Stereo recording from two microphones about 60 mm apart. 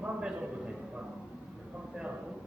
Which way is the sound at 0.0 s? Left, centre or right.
Centre.